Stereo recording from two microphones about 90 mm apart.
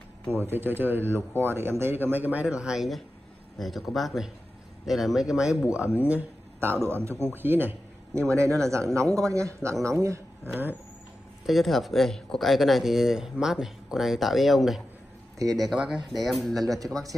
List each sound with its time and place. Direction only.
0.5 s a man's voice: 20° right (ahead or behind)
6.0 s a man's voice: 20° right (ahead or behind)
8.3 s speech: 35° right (ahead or behind)
11.4 s speech: centre (ahead or behind)